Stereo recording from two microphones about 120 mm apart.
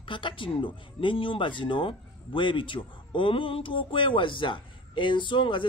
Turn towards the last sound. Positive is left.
turn(degrees=45)  # may be behind; listen again after turning